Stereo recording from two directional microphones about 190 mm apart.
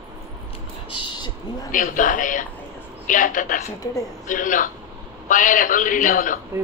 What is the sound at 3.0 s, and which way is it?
Speech, 45° left (ahead or behind).